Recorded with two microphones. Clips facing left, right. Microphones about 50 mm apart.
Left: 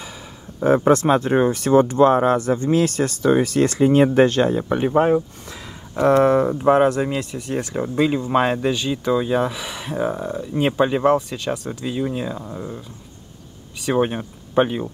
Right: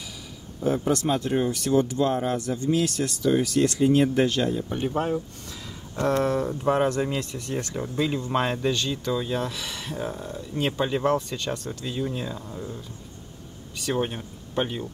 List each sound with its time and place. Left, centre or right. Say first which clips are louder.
0.6 s speech: left 9 dB; left
5.4 s speech: left 3 dB; left
7.0 s speech: left 4 dB; centre
7.7 s speech: left 8 dB; left
9.9 s speech: left 11 dB; left
11.1 s speech: left 5 dB; centre; by 14.9 s left